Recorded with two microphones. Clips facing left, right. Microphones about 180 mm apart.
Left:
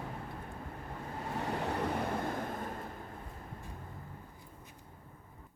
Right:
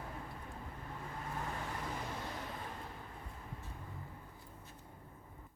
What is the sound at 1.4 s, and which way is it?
Vehicle, 75° left (ahead or behind).